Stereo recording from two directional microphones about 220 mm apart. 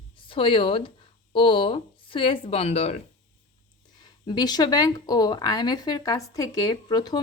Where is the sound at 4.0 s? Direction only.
20° left (ahead or behind).